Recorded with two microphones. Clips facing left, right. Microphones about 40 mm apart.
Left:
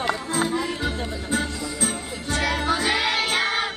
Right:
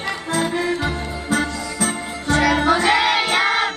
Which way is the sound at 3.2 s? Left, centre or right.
Right.